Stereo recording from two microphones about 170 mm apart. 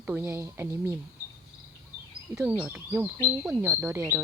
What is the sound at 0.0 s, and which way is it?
Speech, 10° right (ahead or behind).